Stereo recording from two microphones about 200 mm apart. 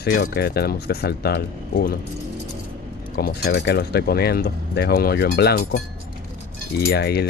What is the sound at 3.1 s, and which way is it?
Speech, 50° left (ahead or behind).